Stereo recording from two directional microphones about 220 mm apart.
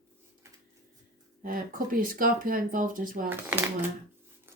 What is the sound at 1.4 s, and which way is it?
A woman's voice, 40° right (ahead or behind).